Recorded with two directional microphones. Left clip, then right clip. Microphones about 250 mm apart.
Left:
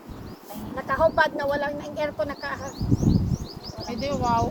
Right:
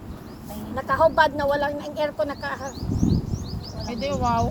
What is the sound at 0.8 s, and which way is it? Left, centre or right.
Speech, right.